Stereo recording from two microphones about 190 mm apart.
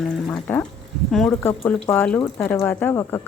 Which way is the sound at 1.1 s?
Centre (ahead or behind).